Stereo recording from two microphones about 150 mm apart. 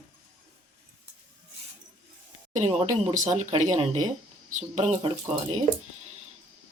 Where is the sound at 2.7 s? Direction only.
45° right (ahead or behind).